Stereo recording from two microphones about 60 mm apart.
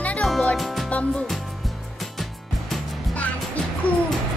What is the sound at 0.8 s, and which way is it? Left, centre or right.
Music, left.